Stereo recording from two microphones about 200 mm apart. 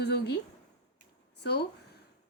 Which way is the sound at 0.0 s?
55° left (ahead or behind).